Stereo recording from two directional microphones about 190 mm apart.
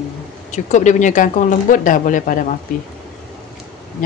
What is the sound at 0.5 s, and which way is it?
Speech, 40° left (ahead or behind).